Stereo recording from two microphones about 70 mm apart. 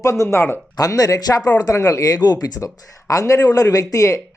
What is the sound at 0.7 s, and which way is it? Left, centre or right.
Speech, left.